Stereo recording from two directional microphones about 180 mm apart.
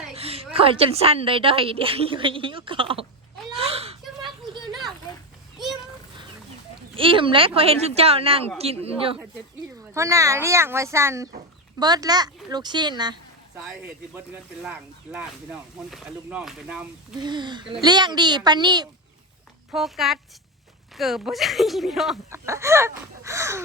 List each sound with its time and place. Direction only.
0.1 s a woman's voice: 35° right (ahead or behind)
3.5 s a sound: 35° right (ahead or behind)
5.5 s a sound: centre (ahead or behind)
6.9 s a woman's voice: 30° right (ahead or behind)
9.9 s chicken: 15° right (ahead or behind)
11.8 s speech: 20° right (ahead or behind)
13.6 s speech: 5° right (ahead or behind)
17.2 s speech: 25° right (ahead or behind)
19.7 s speech: centre (ahead or behind)
22.3 s chicken: 15° right (ahead or behind)